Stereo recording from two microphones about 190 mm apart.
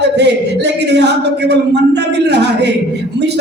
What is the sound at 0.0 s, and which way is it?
Speech, 65° right (ahead or behind).